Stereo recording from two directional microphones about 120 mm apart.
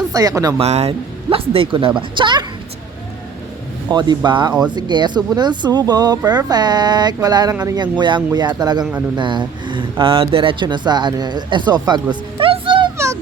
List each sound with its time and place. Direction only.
0.1 s speech: 30° right (ahead or behind)
0.6 s speech: 60° right (ahead or behind); by 2.4 s 40° right (ahead or behind)
3.8 s speech: 35° right (ahead or behind)
12.4 s music: 45° right (ahead or behind)